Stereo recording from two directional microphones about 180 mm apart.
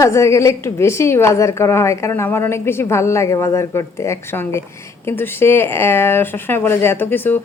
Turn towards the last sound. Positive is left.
turn(degrees=10)  # may be behind; listen again after turning